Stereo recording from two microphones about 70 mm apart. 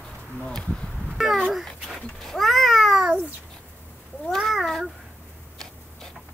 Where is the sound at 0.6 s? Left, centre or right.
Centre.